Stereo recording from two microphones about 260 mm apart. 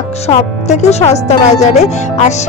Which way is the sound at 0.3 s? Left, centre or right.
Left.